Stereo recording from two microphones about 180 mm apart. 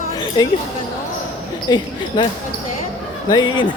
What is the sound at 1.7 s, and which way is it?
Basketball bounce, 25° left (ahead or behind).